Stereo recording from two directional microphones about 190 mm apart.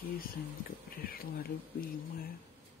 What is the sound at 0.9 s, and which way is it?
Speech, 50° left (ahead or behind).